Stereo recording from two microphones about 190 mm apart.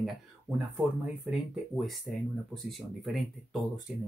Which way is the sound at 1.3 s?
Centre (ahead or behind).